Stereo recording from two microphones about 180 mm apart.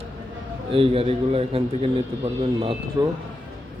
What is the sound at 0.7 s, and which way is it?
Speech, 30° right (ahead or behind).